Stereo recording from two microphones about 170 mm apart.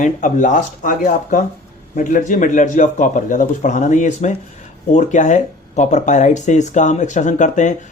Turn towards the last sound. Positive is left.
turn(degrees=45)  # may be behind; listen again after turning